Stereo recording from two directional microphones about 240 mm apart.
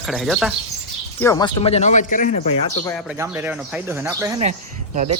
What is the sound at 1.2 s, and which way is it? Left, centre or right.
Speech, centre.